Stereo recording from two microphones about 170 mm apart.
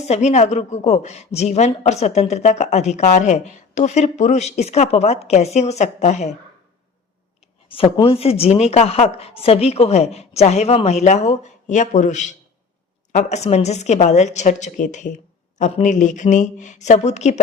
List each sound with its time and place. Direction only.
0.0 s a woman's voice: 40° left (ahead or behind)
7.7 s a woman's voice: 30° left (ahead or behind)